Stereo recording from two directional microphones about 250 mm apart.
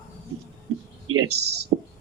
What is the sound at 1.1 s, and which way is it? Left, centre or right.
Speech, right.